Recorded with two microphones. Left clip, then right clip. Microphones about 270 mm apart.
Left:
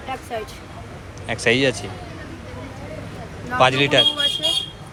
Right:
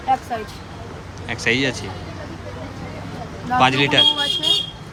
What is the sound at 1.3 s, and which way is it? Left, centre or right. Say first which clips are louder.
Speech: left 2 dB; centre.